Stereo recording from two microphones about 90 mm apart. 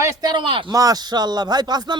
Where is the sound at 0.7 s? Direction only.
45° right (ahead or behind).